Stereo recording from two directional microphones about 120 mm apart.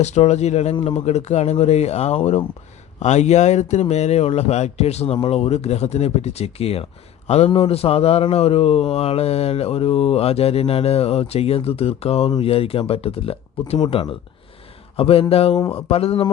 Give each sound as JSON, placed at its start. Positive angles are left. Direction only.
{"t": 0.0, "sound": "speech", "side_deg": 70}
{"t": 14.9, "sound": "speech", "side_deg": 55}